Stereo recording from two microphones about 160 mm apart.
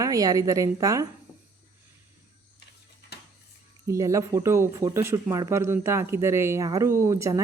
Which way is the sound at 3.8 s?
20° right (ahead or behind).